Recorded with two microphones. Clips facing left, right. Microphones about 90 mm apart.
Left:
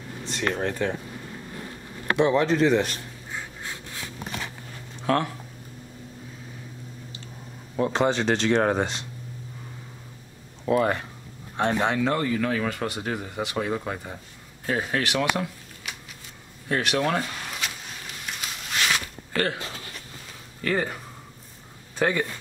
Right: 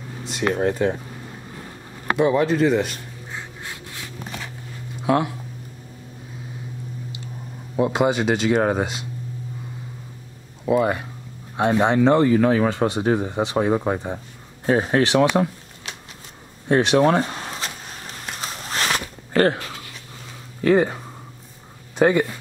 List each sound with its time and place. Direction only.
0.2 s speech: 15° right (ahead or behind)
2.1 s speech: 5° right (ahead or behind)
5.0 s speech: 10° right (ahead or behind)
7.7 s speech: 10° right (ahead or behind)
10.6 s speech: 5° right (ahead or behind)
11.9 s speech: 25° right (ahead or behind)
16.6 s a sound: 25° right (ahead or behind)
20.6 s speech: 25° right (ahead or behind)
21.9 s a sound: 20° right (ahead or behind)